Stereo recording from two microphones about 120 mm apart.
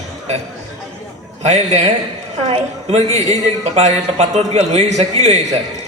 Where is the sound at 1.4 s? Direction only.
65° right (ahead or behind).